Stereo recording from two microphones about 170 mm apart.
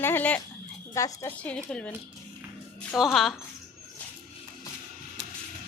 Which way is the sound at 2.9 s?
Centre (ahead or behind).